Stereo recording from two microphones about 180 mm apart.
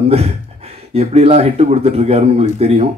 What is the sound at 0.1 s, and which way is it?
Speech, 35° right (ahead or behind).